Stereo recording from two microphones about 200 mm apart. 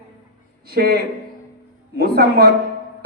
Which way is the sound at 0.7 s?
50° right (ahead or behind).